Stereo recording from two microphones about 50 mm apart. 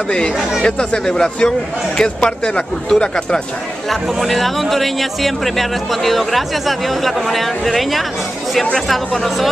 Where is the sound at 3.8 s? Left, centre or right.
Centre.